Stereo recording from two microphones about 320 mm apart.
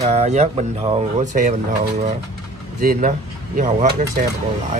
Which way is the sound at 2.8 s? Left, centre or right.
Right.